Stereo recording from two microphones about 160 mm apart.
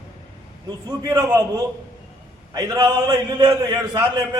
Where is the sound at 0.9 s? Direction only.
20° right (ahead or behind).